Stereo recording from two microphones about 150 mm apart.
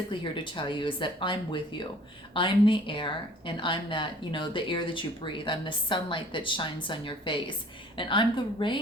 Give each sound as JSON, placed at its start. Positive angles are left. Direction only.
{"t": 0.1, "sound": "a woman's voice", "side_deg": 35}